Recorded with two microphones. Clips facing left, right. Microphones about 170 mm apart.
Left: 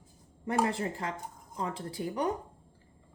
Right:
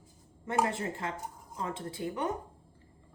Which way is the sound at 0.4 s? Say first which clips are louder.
Left 1 dB; 35° left (ahead or behind).